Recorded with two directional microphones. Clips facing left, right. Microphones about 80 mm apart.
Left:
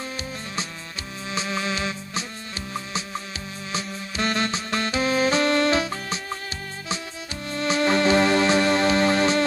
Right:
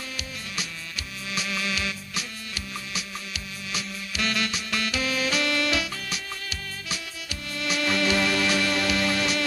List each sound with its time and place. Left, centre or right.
1.3 s music: left
3.7 s music: left
7.5 s music: left